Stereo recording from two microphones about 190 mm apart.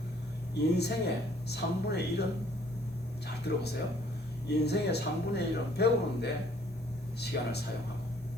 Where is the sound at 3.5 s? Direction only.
60° left (ahead or behind).